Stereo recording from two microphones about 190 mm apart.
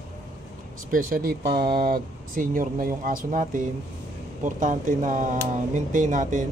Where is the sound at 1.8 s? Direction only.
50° right (ahead or behind).